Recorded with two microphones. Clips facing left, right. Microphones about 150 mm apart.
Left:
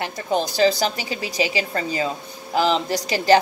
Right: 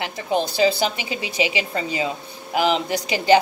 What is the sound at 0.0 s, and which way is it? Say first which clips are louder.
A woman's voice: even; 10° right (ahead or behind).